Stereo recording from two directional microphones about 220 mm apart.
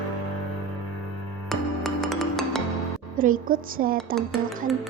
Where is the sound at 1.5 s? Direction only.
Centre (ahead or behind).